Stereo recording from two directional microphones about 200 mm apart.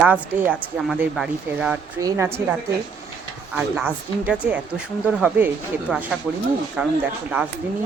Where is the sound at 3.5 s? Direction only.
5° right (ahead or behind).